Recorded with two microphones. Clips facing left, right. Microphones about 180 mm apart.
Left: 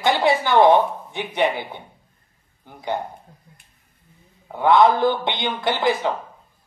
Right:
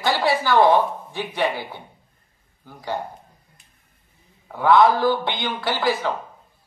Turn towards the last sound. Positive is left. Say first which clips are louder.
# left 2 dB
turn(degrees=20)  # may be behind; listen again after turning